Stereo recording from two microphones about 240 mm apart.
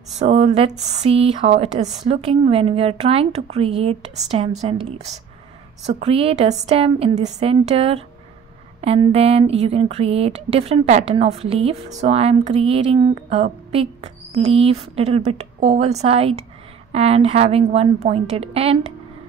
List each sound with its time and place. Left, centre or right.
0.2 s speech: right